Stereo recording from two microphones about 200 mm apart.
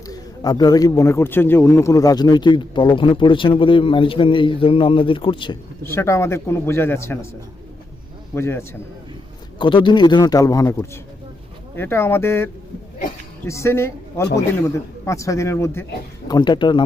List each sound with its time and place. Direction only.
0.1 s speech: 20° left (ahead or behind)
5.8 s a man's voice: 15° left (ahead or behind)
8.4 s a man's voice: 15° left (ahead or behind)
9.6 s a man's voice: 25° left (ahead or behind)